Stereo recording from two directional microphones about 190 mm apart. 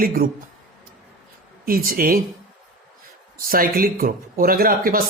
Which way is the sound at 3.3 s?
50° right (ahead or behind).